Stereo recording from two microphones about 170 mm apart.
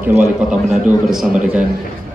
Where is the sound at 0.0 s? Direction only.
10° right (ahead or behind).